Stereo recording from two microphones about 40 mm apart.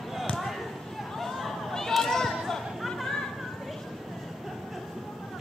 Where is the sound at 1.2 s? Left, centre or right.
Centre.